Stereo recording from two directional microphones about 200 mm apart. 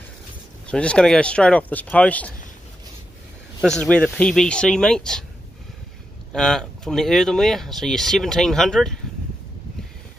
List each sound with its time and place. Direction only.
0.7 s speech: 5° left (ahead or behind)
3.6 s speech: 5° left (ahead or behind)
6.3 s speech: centre (ahead or behind)